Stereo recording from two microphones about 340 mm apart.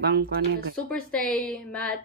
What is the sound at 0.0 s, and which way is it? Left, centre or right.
Speech, right.